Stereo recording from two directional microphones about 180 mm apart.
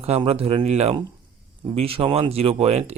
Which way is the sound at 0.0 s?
35° right (ahead or behind).